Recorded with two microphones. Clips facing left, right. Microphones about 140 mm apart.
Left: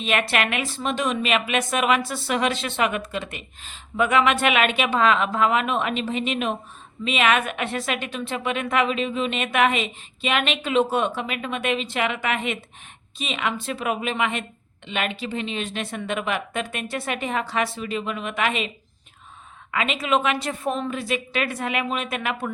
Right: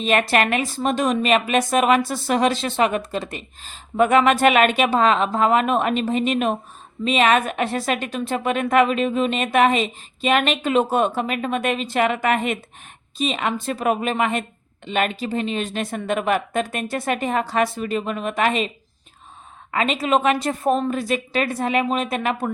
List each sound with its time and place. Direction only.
0.0 s a woman's voice: 40° right (ahead or behind)
19.7 s speech: 40° right (ahead or behind)